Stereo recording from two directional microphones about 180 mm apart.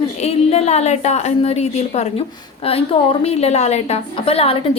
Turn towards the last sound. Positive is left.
turn(degrees=30)  # may be behind; listen again after turning